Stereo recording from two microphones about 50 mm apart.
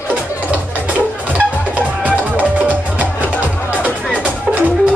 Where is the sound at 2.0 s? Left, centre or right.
Right.